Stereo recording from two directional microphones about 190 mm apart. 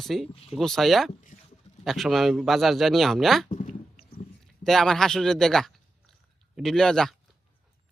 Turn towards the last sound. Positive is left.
turn(degrees=5)  # may be behind; listen again after turning